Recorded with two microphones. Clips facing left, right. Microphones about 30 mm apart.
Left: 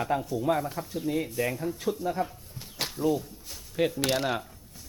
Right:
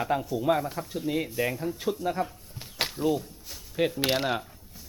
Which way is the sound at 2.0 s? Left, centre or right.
Centre.